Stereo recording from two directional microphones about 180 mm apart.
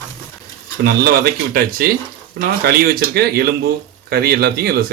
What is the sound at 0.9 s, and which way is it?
Speech, 60° right (ahead or behind).